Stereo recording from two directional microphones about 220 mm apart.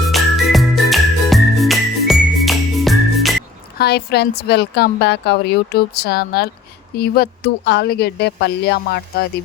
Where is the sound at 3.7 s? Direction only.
45° left (ahead or behind).